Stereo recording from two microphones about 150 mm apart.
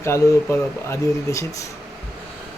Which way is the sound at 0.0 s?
15° left (ahead or behind).